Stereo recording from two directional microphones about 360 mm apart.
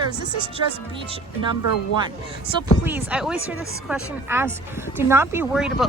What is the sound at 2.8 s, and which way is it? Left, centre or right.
Speech, centre.